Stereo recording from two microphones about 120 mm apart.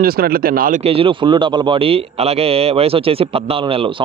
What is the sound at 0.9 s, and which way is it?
A man's voice, 45° right (ahead or behind).